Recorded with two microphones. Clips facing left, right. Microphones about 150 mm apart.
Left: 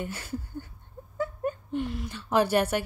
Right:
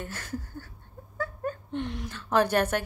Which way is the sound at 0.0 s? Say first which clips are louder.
Left 2 dB; 10° left (ahead or behind).